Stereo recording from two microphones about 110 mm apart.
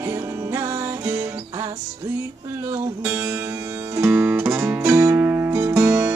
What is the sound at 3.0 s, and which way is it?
Music, 15° right (ahead or behind).